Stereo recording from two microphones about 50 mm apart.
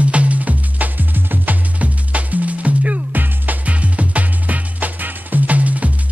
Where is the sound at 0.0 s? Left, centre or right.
Right.